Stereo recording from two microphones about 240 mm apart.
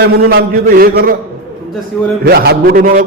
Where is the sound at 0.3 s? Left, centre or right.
Right.